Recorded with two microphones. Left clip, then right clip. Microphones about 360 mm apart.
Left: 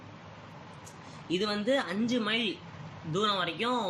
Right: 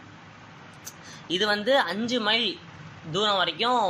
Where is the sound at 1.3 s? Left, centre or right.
Centre.